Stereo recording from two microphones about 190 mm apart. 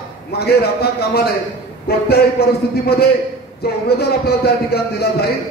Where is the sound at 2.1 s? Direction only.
55° left (ahead or behind).